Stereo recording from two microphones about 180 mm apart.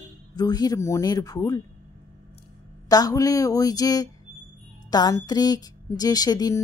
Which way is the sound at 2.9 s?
20° left (ahead or behind).